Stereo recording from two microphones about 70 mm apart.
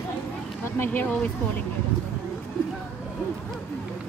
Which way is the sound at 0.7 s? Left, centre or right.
Left.